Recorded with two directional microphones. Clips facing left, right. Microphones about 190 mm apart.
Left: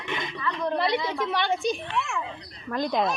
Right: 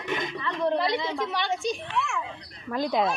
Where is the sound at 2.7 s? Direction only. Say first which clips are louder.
Even; 5° right (ahead or behind).